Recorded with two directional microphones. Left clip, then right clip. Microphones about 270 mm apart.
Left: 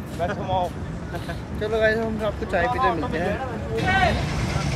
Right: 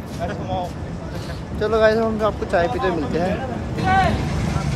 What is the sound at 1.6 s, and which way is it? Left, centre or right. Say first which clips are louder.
Speech: right 5 dB; centre.